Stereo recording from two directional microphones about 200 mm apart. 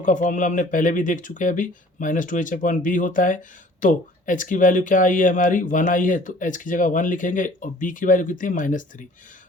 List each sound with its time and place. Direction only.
0.0 s speech: 40° left (ahead or behind)